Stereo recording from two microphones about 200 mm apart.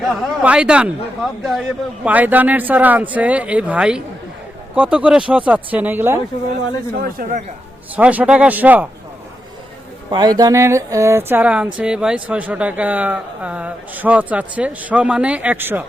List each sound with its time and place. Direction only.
0.0 s speech: centre (ahead or behind)
7.0 s speech: 45° right (ahead or behind)
7.9 s speech: 5° right (ahead or behind)
10.1 s speech: 20° right (ahead or behind)